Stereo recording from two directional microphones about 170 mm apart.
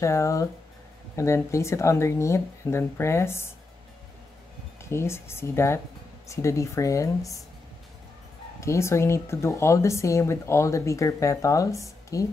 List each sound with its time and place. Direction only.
0.0 s speech: 20° left (ahead or behind)
4.8 s speech: 15° left (ahead or behind)
8.5 s speech: 15° left (ahead or behind)